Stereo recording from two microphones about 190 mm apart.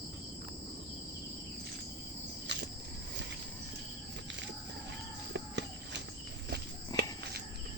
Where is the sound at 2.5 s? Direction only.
65° right (ahead or behind).